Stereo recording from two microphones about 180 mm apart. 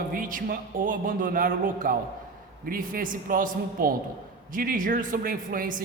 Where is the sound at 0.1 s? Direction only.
50° right (ahead or behind).